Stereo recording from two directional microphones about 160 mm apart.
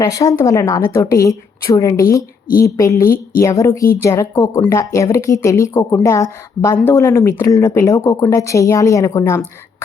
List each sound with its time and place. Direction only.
0.0 s speech: 20° left (ahead or behind)